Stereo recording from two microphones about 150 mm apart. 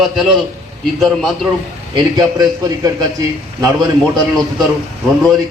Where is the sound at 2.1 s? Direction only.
25° right (ahead or behind).